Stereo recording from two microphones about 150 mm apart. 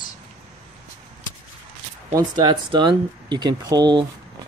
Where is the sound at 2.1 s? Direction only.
30° right (ahead or behind).